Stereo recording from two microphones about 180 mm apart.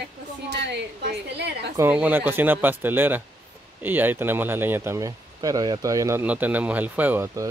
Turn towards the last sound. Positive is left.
turn(degrees=-10)  # may be behind; listen again after turning